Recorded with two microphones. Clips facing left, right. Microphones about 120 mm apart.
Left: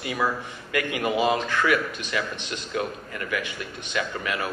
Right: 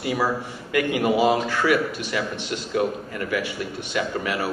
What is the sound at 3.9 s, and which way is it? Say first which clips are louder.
Speech: right 3 dB; 25° right (ahead or behind).